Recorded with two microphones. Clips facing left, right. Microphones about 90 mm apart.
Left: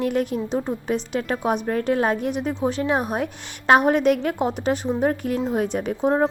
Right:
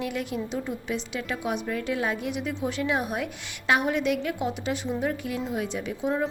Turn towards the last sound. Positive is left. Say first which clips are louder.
# left 7 dB
turn(degrees=45)  # may be behind; listen again after turning